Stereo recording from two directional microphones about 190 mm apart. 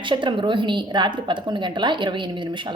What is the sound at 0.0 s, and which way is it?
A woman's voice, 25° right (ahead or behind).